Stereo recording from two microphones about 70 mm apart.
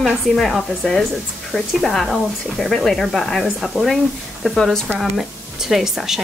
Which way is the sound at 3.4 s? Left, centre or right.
Centre.